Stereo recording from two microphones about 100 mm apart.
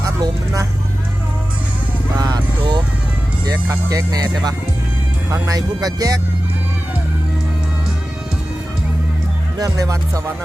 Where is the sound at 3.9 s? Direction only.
35° right (ahead or behind).